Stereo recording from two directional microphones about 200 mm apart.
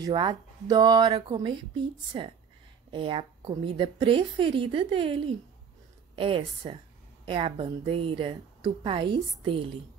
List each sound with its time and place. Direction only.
0.0 s a woman's voice: 20° right (ahead or behind)